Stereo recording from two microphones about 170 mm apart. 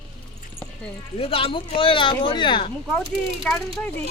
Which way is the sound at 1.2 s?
35° left (ahead or behind).